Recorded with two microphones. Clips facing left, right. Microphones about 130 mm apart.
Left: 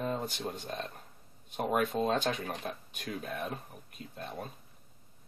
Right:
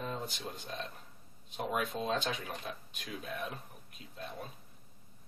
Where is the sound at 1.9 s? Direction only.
55° left (ahead or behind).